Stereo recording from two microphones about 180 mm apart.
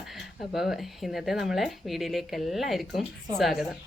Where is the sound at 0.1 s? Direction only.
Centre (ahead or behind).